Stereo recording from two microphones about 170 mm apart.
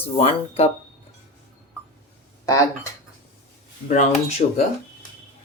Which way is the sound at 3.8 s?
40° left (ahead or behind).